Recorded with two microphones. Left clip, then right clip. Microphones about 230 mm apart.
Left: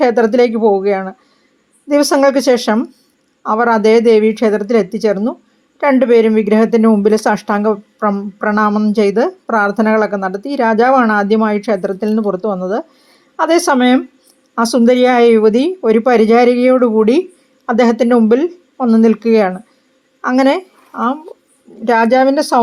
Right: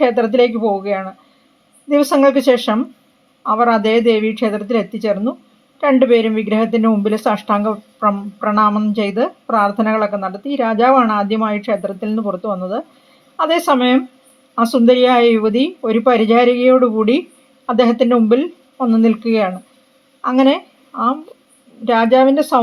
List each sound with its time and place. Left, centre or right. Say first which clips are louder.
0.0 s speech: left 2 dB; left